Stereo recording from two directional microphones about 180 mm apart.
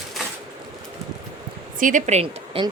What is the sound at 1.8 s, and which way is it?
Speech, 40° right (ahead or behind).